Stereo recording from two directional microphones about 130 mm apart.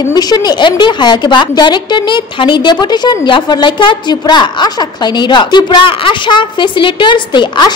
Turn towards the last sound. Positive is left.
turn(degrees=35)  # may be behind; listen again after turning